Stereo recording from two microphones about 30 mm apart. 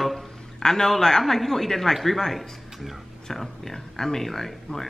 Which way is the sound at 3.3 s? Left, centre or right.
Centre.